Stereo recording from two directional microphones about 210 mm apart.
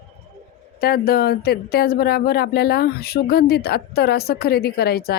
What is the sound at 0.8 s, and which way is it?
Speech, 50° left (ahead or behind).